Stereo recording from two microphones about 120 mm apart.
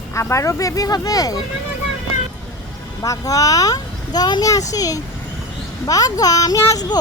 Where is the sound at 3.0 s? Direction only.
30° left (ahead or behind).